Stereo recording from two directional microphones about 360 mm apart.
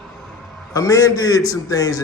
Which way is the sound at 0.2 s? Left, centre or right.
Centre.